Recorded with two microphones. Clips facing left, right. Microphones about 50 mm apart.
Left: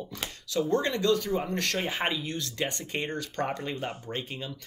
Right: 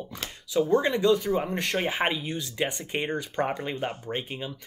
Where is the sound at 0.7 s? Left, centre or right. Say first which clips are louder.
Right 3 dB; centre.